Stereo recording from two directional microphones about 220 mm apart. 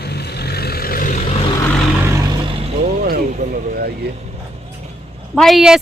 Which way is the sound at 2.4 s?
25° right (ahead or behind).